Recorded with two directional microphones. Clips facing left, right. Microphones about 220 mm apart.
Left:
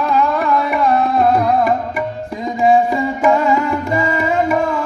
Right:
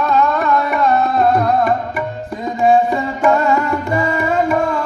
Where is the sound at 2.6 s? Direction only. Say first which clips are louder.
Even; 10° left (ahead or behind).